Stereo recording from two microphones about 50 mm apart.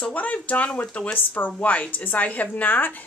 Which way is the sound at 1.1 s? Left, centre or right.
Left.